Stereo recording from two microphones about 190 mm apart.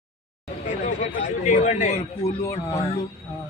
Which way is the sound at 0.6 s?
40° left (ahead or behind).